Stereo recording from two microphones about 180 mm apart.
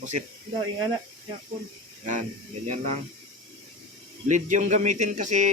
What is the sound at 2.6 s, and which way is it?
Speech, 40° right (ahead or behind).